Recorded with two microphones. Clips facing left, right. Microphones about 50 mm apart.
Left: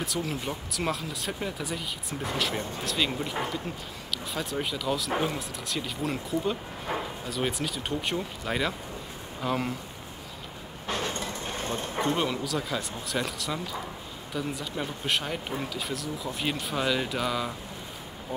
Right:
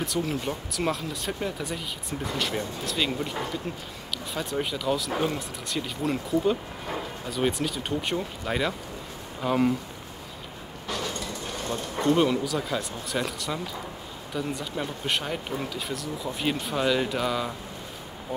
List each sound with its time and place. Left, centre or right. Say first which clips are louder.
0.0 s speech: right 3 dB; centre
10.9 s a sound: left 1 dB; left
12.2 s speech: right 5 dB; centre